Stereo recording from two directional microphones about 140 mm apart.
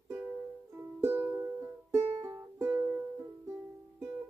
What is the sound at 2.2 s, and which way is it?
Music, 15° right (ahead or behind).